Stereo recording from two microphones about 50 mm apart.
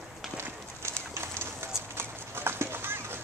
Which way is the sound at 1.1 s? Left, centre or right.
Right.